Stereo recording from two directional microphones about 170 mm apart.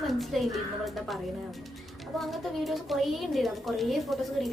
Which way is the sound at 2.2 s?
Centre (ahead or behind).